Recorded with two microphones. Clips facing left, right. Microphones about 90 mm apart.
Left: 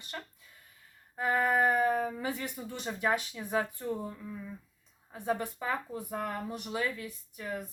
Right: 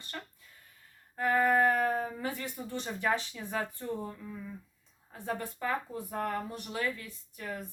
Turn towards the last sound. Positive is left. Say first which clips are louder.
# left 2 dB
turn(degrees=15)  # may be behind; listen again after turning